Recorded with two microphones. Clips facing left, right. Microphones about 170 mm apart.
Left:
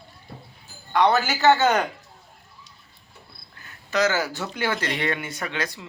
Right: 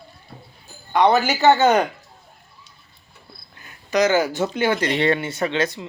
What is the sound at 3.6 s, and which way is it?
Speech, 15° right (ahead or behind).